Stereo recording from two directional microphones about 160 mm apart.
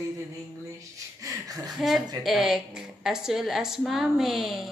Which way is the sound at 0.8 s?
20° right (ahead or behind).